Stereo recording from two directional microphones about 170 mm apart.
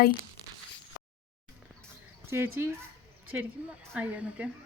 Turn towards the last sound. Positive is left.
turn(degrees=-5)  # may be behind; listen again after turning